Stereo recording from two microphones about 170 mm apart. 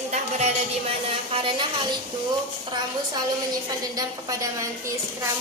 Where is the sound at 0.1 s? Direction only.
40° right (ahead or behind).